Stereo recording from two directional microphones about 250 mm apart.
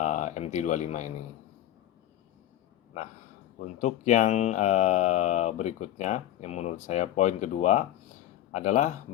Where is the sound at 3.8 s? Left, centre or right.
Left.